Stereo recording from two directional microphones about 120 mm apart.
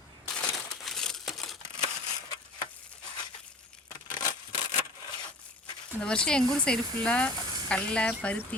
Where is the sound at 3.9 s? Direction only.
35° left (ahead or behind).